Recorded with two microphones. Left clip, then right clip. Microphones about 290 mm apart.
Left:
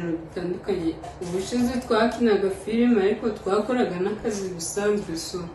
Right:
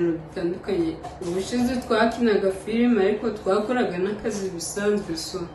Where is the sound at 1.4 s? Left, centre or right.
Centre.